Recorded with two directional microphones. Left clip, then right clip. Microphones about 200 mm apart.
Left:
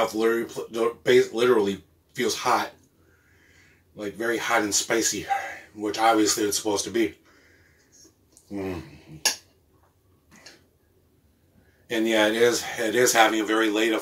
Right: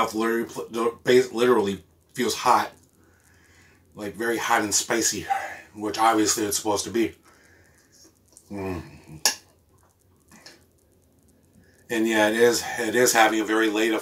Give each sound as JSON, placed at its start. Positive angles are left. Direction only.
{"t": 0.0, "sound": "speech", "side_deg": 0}
{"t": 3.9, "sound": "speech", "side_deg": 0}
{"t": 8.5, "sound": "speech", "side_deg": 0}
{"t": 11.9, "sound": "speech", "side_deg": 0}